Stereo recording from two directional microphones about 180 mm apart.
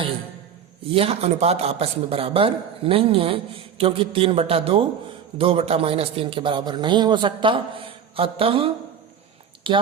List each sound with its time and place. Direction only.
0.9 s a man's voice: 35° right (ahead or behind)